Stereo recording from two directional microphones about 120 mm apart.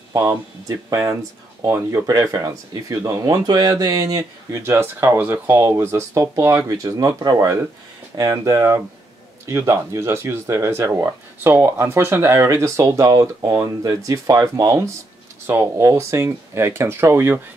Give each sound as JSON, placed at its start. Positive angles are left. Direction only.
{"t": 0.1, "sound": "speech", "side_deg": -30}